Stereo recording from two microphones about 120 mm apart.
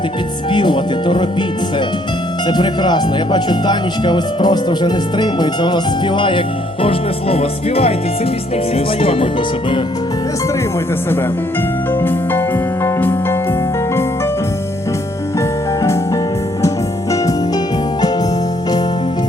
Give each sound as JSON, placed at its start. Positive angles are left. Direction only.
{"t": 0.5, "sound": "speech", "side_deg": 40}
{"t": 2.5, "sound": "speech", "side_deg": 40}
{"t": 6.8, "sound": "music", "side_deg": 55}
{"t": 8.7, "sound": "speech", "side_deg": 50}
{"t": 12.8, "sound": "music", "side_deg": 15}
{"t": 15.4, "sound": "music", "side_deg": 25}